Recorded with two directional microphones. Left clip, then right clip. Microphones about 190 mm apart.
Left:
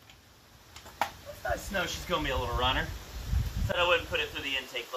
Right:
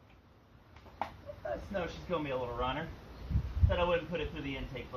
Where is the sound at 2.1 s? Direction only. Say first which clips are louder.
Left 4 dB; 40° left (ahead or behind).